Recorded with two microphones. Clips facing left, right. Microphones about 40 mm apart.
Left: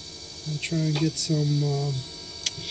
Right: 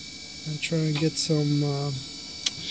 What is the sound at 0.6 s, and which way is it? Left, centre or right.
Speech, right.